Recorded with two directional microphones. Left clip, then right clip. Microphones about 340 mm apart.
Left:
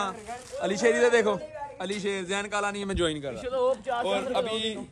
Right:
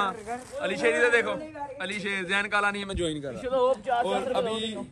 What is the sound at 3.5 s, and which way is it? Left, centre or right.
Speech, centre.